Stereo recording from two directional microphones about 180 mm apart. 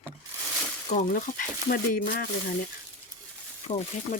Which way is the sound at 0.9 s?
45° left (ahead or behind).